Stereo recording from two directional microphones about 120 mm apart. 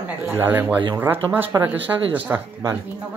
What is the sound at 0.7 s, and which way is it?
Speech, 40° right (ahead or behind).